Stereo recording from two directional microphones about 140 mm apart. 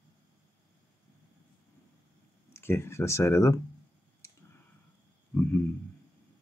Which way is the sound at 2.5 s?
20° left (ahead or behind).